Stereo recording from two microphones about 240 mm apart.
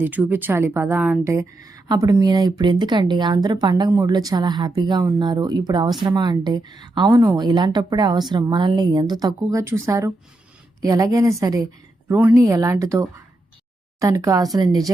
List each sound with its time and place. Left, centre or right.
0.0 s speech: centre